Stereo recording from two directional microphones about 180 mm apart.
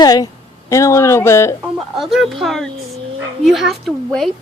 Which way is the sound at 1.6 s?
Centre (ahead or behind).